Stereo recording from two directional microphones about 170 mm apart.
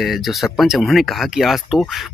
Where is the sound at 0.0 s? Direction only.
Centre (ahead or behind).